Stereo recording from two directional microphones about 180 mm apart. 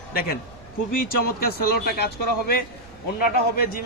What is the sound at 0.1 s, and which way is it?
A man's voice, 55° left (ahead or behind).